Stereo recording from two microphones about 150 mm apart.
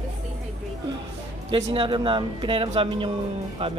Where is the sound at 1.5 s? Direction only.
35° right (ahead or behind).